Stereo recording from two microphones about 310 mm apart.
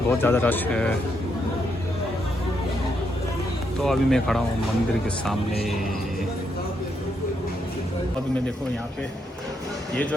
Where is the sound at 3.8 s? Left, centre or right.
Centre.